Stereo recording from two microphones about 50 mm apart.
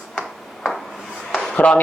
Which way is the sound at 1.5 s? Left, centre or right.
Left.